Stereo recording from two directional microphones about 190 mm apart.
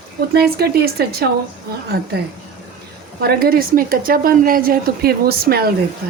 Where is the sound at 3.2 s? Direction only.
55° right (ahead or behind).